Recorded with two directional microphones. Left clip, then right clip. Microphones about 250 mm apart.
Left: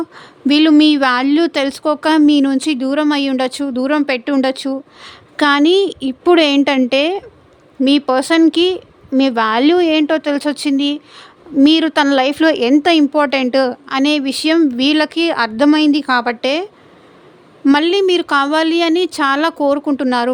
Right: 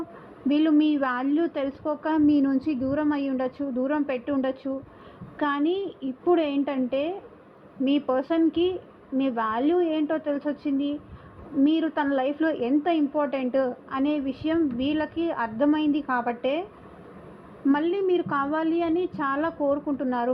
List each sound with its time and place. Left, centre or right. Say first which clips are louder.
0.6 s a woman's voice: left 12 dB; left
7.9 s speech: left 11 dB; left
8.2 s a woman's voice: left 11 dB; left
17.7 s a woman's voice: left 11 dB; left